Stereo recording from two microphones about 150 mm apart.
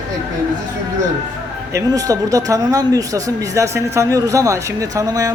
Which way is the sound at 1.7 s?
25° right (ahead or behind).